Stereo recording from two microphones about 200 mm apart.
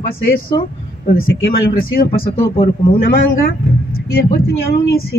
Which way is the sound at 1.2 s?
50° left (ahead or behind).